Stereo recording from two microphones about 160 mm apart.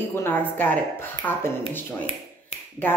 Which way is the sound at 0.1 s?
15° left (ahead or behind).